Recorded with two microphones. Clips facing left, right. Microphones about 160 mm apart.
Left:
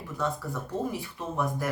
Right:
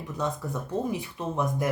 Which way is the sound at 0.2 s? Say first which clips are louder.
Right 1 dB; 20° right (ahead or behind).